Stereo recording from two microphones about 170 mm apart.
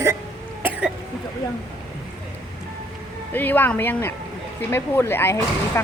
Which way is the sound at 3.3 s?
10° left (ahead or behind).